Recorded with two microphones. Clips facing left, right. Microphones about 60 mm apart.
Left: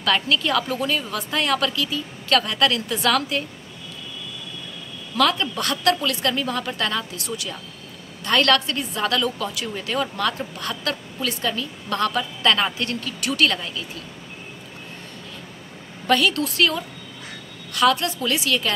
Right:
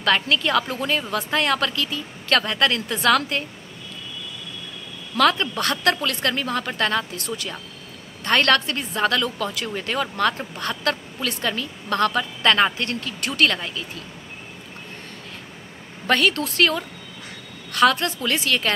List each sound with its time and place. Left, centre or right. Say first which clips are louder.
0.0 s a woman's voice: right 1 dB; right
5.1 s a woman's voice: right 2 dB; right
16.1 s a woman's voice: even; right